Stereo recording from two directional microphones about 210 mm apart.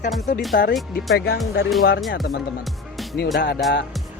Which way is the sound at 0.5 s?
40° left (ahead or behind).